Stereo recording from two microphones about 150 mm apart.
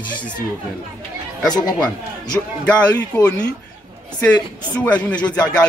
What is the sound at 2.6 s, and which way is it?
A man's voice, 10° left (ahead or behind).